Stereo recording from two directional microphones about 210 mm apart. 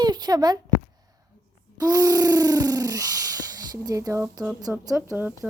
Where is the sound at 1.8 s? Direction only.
15° right (ahead or behind).